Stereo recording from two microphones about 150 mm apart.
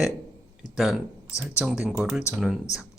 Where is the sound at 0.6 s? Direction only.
30° left (ahead or behind).